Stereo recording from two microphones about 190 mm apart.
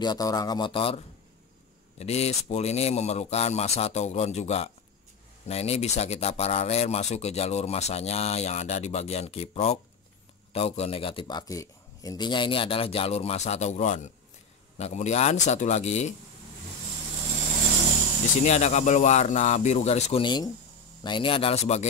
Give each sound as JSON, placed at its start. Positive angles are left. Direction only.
{"t": 0.0, "sound": "speech", "side_deg": 20}
{"t": 18.4, "sound": "speech", "side_deg": 35}